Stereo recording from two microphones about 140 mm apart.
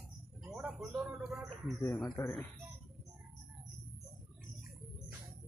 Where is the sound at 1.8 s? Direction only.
20° left (ahead or behind).